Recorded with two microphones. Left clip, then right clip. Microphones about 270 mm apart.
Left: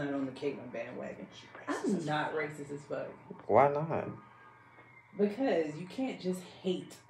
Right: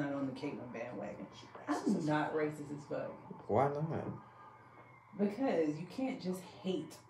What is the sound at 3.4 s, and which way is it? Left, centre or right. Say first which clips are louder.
Speech: left 7 dB; left.